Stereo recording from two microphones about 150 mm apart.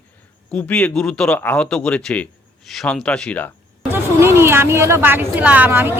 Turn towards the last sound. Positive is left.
turn(degrees=-15)  # may be behind; listen again after turning